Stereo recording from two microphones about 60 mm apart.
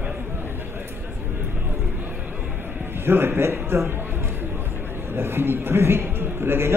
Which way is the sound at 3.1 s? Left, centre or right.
Right.